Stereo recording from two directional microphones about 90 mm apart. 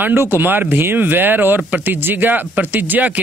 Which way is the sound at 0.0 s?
25° right (ahead or behind).